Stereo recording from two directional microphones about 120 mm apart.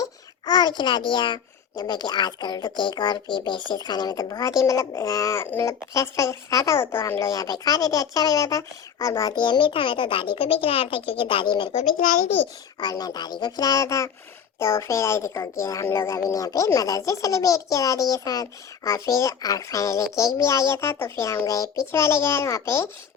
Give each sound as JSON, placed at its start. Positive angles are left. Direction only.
{"t": 0.0, "sound": "a child's voice", "side_deg": 35}
{"t": 11.7, "sound": "a child's voice", "side_deg": 75}
{"t": 12.8, "sound": "a child's voice", "side_deg": 30}